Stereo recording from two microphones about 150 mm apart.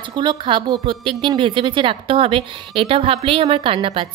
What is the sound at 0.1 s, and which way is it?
A woman's voice, 30° right (ahead or behind).